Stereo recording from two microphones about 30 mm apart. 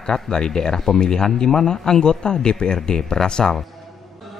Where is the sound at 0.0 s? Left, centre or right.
Left.